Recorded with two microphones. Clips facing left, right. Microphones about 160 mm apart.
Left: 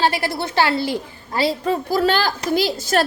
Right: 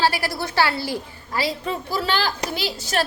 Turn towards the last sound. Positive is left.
turn(degrees=45)  # may be behind; listen again after turning